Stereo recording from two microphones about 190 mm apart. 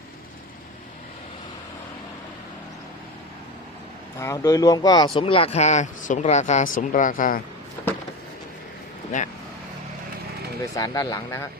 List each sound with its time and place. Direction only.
4.2 s speech: 15° left (ahead or behind); by 7.4 s 45° left (ahead or behind)
10.8 s speech: 20° left (ahead or behind)